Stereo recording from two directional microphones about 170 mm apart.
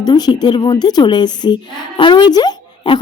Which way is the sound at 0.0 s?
25° left (ahead or behind).